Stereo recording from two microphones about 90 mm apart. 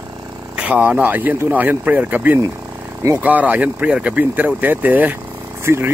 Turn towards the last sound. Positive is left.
turn(degrees=-30)  # may be behind; listen again after turning